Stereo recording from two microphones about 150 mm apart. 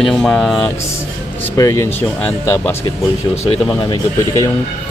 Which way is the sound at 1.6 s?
20° left (ahead or behind).